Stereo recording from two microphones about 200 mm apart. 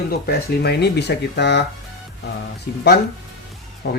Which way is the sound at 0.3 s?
55° left (ahead or behind).